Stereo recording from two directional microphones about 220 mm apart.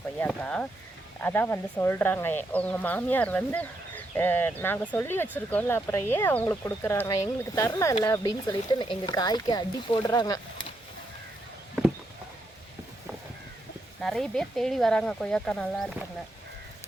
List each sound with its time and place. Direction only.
0.2 s speech: 5° left (ahead or behind)
14.0 s speech: centre (ahead or behind)